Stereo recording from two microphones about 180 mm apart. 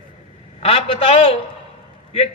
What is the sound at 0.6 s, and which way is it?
Speech, 35° left (ahead or behind).